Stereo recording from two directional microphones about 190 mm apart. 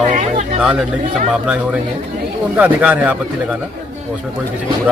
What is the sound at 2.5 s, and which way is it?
Speech, 10° right (ahead or behind).